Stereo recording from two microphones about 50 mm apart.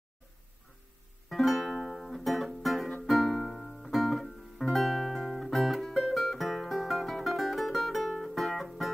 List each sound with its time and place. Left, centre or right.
1.3 s music: centre